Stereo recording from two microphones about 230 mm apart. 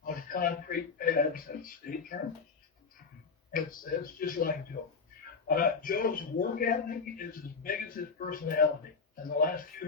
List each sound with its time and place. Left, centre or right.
0.0 s a man's voice: left
3.5 s a man's voice: left